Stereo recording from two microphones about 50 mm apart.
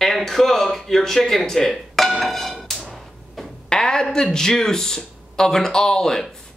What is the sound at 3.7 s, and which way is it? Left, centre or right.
A woman's voice, centre.